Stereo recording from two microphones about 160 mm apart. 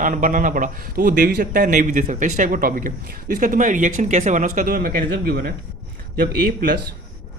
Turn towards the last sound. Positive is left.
turn(degrees=-65)  # may be behind; listen again after turning